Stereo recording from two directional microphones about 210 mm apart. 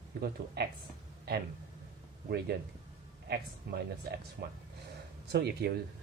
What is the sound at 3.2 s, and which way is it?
Speech, 50° right (ahead or behind).